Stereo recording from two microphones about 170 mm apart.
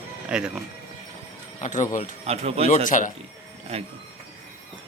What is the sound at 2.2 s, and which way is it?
Speech, 35° right (ahead or behind).